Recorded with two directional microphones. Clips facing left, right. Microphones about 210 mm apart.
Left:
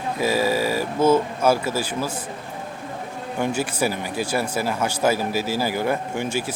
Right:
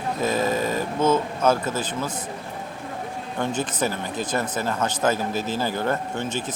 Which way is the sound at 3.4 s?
10° left (ahead or behind).